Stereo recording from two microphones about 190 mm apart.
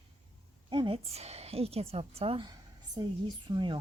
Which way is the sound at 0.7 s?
30° right (ahead or behind).